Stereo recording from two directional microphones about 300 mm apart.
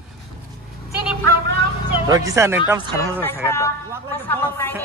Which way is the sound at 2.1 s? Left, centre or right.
Centre.